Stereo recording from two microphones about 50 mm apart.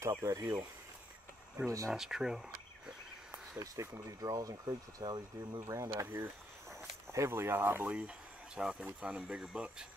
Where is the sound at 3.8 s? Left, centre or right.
Right.